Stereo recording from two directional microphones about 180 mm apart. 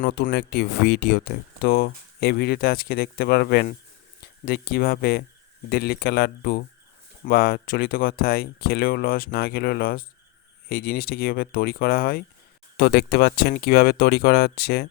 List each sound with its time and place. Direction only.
0.0 s speech: 65° left (ahead or behind)